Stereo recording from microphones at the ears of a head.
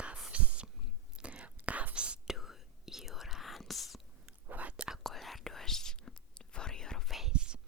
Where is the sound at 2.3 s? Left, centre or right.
Centre.